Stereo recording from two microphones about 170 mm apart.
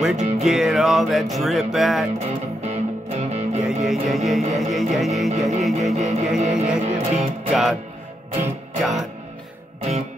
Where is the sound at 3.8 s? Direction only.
Centre (ahead or behind).